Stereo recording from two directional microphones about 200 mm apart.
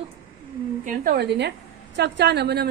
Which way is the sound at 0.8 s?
50° right (ahead or behind).